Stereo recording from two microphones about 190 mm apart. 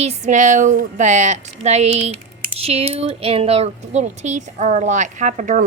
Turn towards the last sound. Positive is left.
turn(degrees=-40)  # may be behind; listen again after turning